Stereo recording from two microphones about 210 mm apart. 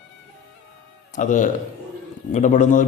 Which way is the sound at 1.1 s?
40° left (ahead or behind).